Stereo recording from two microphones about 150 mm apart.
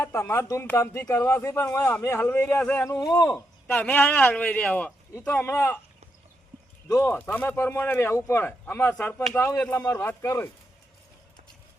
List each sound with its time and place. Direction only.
0.0 s a man's voice: 15° left (ahead or behind)
2.8 s a man's voice: 20° left (ahead or behind)
6.8 s a man's voice: 20° left (ahead or behind)